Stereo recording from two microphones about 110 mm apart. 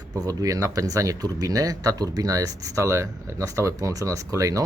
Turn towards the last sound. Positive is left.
turn(degrees=-30)  # may be behind; listen again after turning